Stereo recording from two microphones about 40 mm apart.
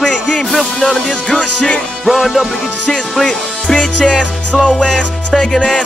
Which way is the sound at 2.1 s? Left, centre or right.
Centre.